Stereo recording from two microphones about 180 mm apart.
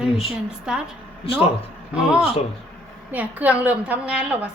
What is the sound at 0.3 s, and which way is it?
Speech, 5° right (ahead or behind).